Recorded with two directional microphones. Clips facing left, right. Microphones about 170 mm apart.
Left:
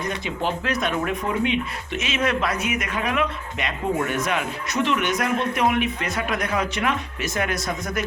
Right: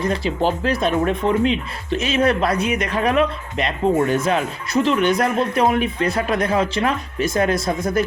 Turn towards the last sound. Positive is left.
turn(degrees=-30)  # may be behind; listen again after turning